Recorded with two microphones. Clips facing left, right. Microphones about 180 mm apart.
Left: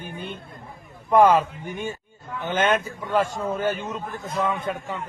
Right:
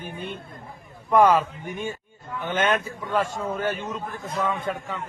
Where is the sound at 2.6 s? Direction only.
Centre (ahead or behind).